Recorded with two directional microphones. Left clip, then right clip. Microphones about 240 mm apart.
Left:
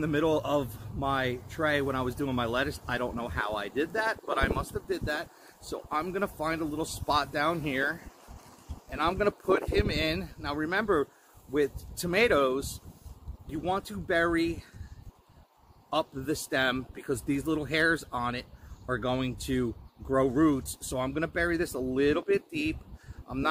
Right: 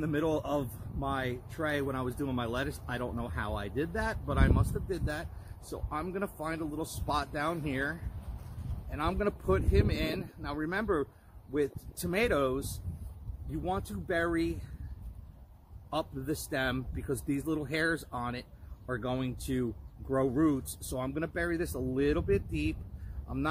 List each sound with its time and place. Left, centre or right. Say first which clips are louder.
0.0 s speech: left 4 dB; centre
15.9 s speech: left 4 dB; centre